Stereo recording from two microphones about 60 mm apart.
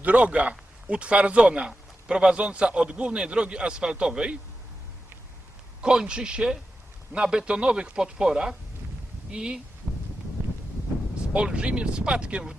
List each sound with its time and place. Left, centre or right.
0.0 s a man's voice: right
5.8 s a man's voice: centre
9.9 s a sound: centre
11.3 s a man's voice: centre